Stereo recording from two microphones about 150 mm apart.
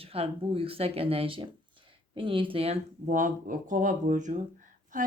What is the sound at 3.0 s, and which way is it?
Speech, 60° right (ahead or behind).